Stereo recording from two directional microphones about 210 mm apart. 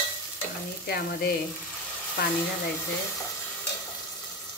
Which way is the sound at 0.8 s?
50° left (ahead or behind).